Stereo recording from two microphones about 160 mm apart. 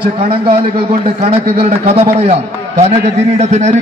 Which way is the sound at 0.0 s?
35° right (ahead or behind).